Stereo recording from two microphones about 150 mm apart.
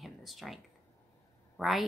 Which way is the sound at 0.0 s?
Centre (ahead or behind).